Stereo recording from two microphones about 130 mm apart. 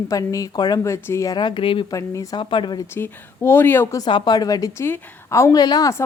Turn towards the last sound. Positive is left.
turn(degrees=25)  # may be behind; listen again after turning